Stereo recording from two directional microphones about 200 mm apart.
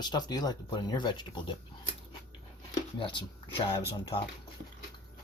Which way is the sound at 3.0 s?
25° left (ahead or behind).